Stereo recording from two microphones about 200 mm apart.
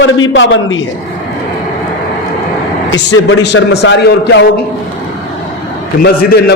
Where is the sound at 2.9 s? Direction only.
70° left (ahead or behind).